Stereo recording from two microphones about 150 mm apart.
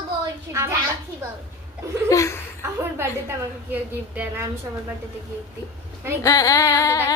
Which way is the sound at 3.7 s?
15° right (ahead or behind).